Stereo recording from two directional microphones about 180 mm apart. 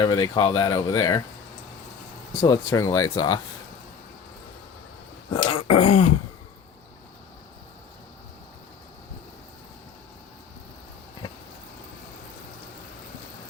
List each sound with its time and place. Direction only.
0.0 s speech: 25° left (ahead or behind)
2.4 s speech: 20° left (ahead or behind)
5.3 s throat clearing: 30° left (ahead or behind)